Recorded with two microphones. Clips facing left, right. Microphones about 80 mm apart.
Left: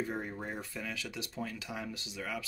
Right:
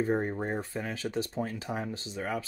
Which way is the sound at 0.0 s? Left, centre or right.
Right.